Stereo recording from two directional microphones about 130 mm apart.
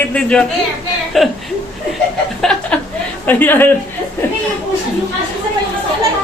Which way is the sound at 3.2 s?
15° left (ahead or behind).